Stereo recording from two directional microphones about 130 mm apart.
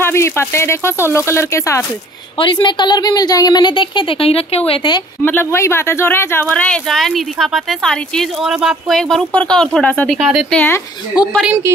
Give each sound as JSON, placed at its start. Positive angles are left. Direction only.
{"t": 0.0, "sound": "speech", "side_deg": 20}
{"t": 2.3, "sound": "a woman's voice", "side_deg": 40}
{"t": 5.2, "sound": "speech", "side_deg": 15}
{"t": 11.1, "sound": "a woman's voice", "side_deg": -5}